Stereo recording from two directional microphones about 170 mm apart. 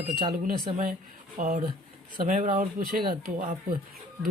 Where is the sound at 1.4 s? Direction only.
50° right (ahead or behind).